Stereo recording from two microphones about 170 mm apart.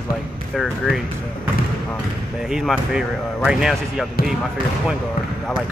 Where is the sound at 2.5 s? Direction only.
5° right (ahead or behind).